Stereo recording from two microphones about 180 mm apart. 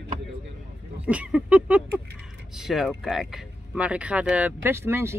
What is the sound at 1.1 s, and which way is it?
Speech, 5° right (ahead or behind).